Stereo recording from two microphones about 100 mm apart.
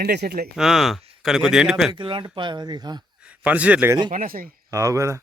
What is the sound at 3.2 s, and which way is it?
Speech, 15° right (ahead or behind).